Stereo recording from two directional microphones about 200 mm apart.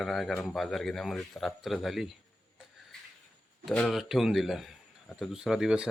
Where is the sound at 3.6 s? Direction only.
Centre (ahead or behind).